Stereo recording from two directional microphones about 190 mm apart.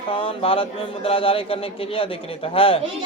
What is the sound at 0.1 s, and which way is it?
Speech, 30° left (ahead or behind).